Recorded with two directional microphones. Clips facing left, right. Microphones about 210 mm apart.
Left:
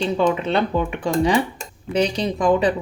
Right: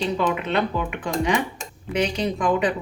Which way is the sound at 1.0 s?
30° left (ahead or behind).